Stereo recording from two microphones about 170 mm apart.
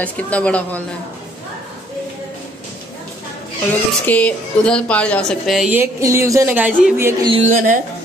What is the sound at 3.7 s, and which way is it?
A woman's voice, 10° left (ahead or behind).